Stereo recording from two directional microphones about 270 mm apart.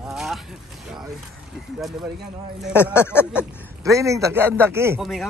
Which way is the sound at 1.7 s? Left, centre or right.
Centre.